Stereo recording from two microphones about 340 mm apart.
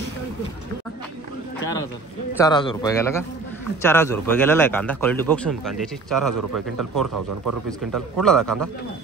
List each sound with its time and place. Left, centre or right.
2.3 s a man's voice: centre
6.3 s speech: right
7.9 s a man's voice: centre